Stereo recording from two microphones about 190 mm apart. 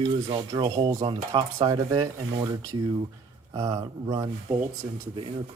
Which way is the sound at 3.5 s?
20° right (ahead or behind).